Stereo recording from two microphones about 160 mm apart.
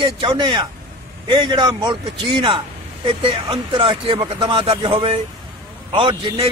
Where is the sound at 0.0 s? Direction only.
30° right (ahead or behind).